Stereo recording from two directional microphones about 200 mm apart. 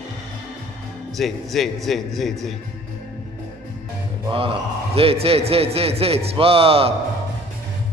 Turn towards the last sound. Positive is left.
turn(degrees=-30)  # may be behind; listen again after turning